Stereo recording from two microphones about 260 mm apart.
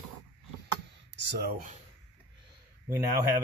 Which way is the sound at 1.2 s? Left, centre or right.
Right.